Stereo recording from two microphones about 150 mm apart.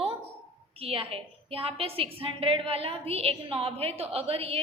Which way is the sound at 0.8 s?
40° right (ahead or behind).